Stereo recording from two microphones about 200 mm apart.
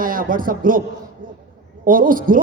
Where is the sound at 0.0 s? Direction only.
45° right (ahead or behind).